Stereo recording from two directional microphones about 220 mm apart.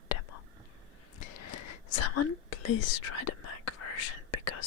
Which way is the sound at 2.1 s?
85° left.